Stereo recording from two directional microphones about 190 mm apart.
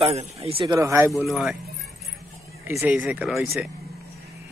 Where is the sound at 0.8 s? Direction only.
15° right (ahead or behind).